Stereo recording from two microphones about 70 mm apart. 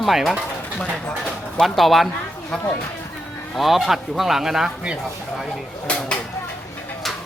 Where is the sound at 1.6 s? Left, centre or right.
Centre.